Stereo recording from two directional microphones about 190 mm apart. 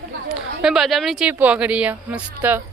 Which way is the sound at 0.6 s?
Centre (ahead or behind).